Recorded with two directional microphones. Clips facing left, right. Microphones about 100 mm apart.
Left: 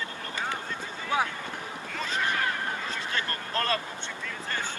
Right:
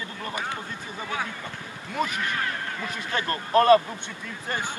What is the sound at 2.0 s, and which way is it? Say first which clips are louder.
Speech: right 2 dB; 15° right (ahead or behind).